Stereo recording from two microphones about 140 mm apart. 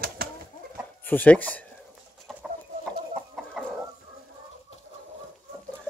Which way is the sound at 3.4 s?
Centre (ahead or behind).